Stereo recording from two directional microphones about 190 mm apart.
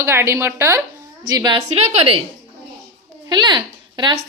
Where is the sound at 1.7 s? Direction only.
35° right (ahead or behind).